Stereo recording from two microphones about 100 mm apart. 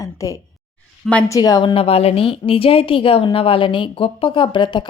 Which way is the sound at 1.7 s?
75° left (ahead or behind).